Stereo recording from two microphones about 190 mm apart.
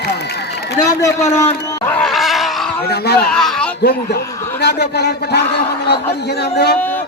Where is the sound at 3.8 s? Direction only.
55° left (ahead or behind).